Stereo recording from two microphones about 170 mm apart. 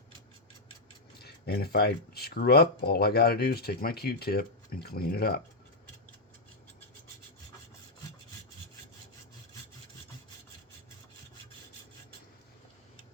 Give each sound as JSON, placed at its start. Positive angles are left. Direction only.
{"t": 1.2, "sound": "speech", "side_deg": 70}